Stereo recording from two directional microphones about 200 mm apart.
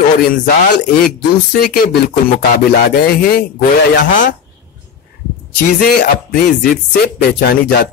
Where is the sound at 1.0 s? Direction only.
50° left (ahead or behind).